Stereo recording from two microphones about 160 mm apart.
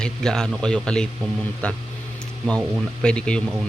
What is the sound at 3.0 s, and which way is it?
Speech, 5° left (ahead or behind).